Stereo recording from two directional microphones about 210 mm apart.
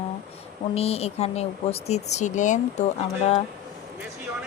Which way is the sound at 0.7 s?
30° left (ahead or behind).